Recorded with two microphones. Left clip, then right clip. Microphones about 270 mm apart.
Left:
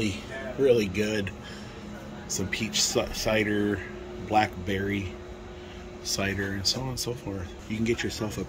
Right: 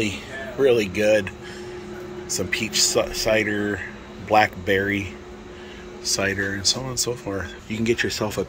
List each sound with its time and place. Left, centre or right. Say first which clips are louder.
0.7 s a man's voice: right 6 dB; centre
6.0 s speech: right 7 dB; centre